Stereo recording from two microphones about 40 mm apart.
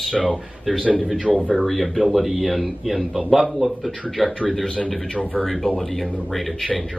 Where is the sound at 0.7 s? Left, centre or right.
Centre.